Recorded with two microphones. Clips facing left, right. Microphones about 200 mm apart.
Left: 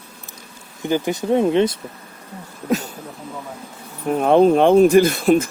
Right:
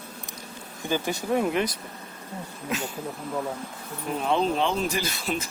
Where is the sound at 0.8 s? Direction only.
20° left (ahead or behind).